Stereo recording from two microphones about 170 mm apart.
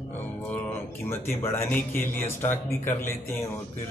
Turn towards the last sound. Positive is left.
turn(degrees=15)  # may be behind; listen again after turning